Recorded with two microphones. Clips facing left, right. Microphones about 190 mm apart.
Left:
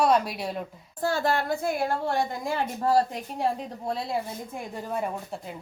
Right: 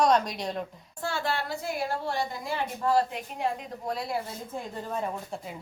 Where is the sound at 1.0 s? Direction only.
40° left (ahead or behind).